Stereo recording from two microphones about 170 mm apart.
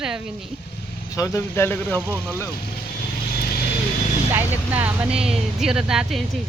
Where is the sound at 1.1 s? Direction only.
20° left (ahead or behind).